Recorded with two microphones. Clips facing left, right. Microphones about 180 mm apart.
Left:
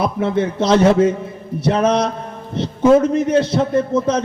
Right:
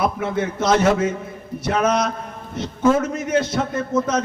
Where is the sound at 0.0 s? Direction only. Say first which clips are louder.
Left 4 dB; 30° left (ahead or behind).